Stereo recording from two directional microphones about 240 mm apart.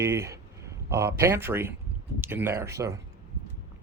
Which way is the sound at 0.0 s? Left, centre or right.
Centre.